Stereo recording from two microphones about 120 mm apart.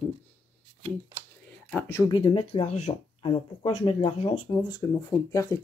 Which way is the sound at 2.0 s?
40° left (ahead or behind).